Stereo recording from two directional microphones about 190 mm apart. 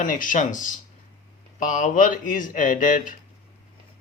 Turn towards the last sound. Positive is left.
turn(degrees=45)  # may be behind; listen again after turning